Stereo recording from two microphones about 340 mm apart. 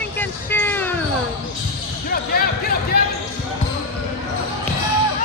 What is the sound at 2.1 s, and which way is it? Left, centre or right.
Basketball bounce, left.